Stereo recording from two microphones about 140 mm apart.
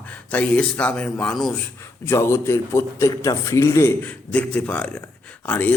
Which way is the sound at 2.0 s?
20° left (ahead or behind).